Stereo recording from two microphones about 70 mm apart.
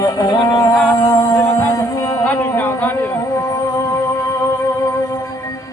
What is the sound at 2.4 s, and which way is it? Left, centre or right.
Music, left.